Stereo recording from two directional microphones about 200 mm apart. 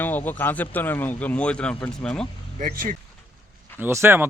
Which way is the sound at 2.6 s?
45° right (ahead or behind).